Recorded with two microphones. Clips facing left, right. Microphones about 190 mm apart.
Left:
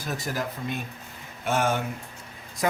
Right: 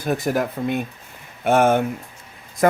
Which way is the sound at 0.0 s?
60° right (ahead or behind).